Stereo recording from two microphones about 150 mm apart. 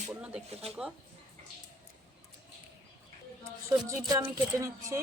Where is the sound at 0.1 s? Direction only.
5° right (ahead or behind).